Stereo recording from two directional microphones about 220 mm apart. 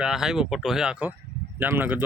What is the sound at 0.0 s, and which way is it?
Speech, 5° right (ahead or behind).